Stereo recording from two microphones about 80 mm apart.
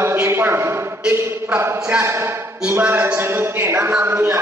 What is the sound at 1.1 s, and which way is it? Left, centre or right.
A man's voice, right.